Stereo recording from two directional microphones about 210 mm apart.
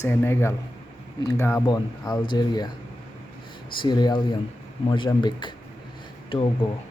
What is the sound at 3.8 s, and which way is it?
Speech, 20° left (ahead or behind).